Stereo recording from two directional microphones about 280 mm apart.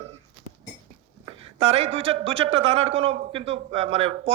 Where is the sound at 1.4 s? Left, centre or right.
Right.